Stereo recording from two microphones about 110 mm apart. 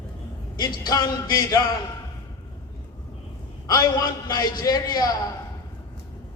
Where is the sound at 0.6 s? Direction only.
40° left (ahead or behind).